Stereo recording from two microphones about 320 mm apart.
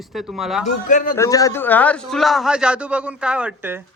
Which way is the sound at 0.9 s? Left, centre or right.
Left.